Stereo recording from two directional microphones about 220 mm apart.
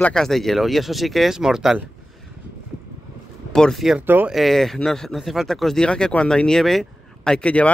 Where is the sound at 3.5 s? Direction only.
Centre (ahead or behind).